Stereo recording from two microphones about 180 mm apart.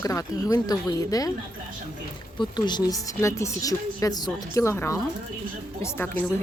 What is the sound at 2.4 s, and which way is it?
Speech, 25° left (ahead or behind).